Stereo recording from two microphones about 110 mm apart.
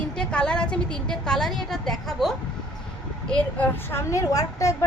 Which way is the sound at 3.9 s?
25° left (ahead or behind).